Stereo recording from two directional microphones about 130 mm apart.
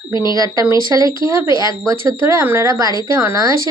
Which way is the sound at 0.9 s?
30° right (ahead or behind).